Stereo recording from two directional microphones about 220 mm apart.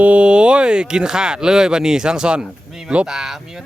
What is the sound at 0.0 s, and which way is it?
Speech, 5° right (ahead or behind).